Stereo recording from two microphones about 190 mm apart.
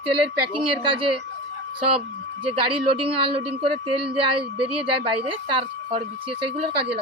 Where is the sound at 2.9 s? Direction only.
30° right (ahead or behind).